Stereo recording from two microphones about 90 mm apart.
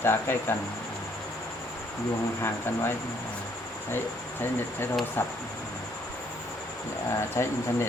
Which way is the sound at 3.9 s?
25° left (ahead or behind).